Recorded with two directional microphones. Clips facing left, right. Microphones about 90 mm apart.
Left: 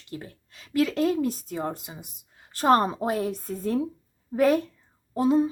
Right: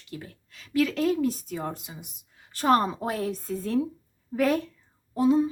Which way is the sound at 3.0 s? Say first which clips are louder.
Left 3 dB; 20° left (ahead or behind).